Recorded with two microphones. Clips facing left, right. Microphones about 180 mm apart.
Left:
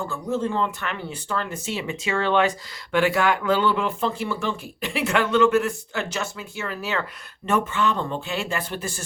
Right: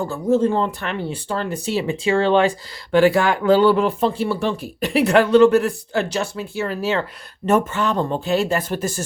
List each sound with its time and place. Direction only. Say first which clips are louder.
0.0 s speech: right 8 dB; 40° right (ahead or behind)